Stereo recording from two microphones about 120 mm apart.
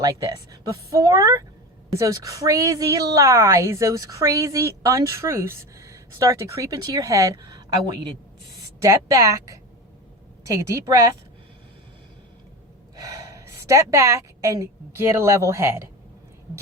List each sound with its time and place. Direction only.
0.0 s a woman's voice: 30° right (ahead or behind)
8.8 s a woman's voice: 30° right (ahead or behind)
13.0 s a woman's voice: 30° right (ahead or behind)